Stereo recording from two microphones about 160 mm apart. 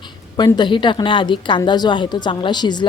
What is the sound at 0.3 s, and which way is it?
A woman's voice, 25° left (ahead or behind).